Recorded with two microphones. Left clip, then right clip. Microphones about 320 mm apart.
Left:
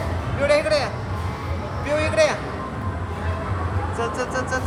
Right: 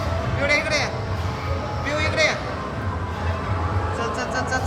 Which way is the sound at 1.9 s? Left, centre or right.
Centre.